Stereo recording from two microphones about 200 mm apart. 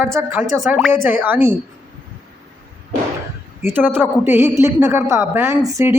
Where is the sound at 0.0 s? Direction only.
10° right (ahead or behind).